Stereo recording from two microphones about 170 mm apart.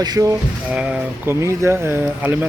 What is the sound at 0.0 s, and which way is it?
Mechanisms, 20° right (ahead or behind).